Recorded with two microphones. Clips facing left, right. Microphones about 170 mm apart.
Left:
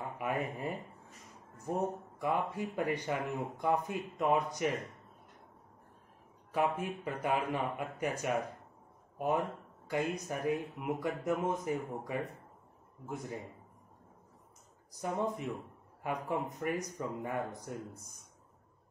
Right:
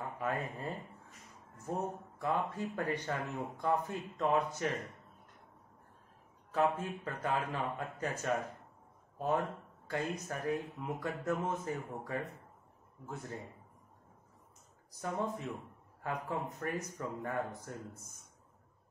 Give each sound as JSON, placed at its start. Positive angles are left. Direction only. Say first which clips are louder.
{"t": 0.2, "sound": "speech", "louder": "left 2 dB", "side_deg": 15}
{"t": 6.5, "sound": "speech", "louder": "even", "side_deg": 15}
{"t": 9.8, "sound": "speech", "louder": "left 3 dB", "side_deg": 15}
{"t": 14.9, "sound": "speech", "louder": "left 2 dB", "side_deg": 15}